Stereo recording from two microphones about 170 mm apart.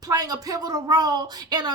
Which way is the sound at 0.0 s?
20° right (ahead or behind).